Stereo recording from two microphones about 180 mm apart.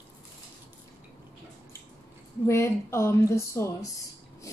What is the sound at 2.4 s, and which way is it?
Speech, 15° left (ahead or behind).